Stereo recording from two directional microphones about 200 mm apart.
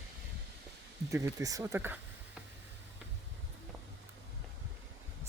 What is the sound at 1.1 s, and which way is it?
Speech, 15° right (ahead or behind).